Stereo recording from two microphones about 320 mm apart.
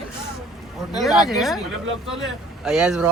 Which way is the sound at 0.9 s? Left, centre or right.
Centre.